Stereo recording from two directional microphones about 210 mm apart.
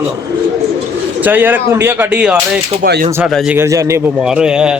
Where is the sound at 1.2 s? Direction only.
10° right (ahead or behind).